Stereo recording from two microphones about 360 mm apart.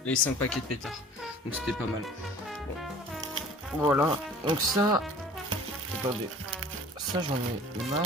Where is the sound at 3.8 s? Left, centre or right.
Centre.